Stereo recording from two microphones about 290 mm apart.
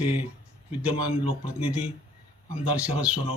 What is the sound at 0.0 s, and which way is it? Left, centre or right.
Speech, centre.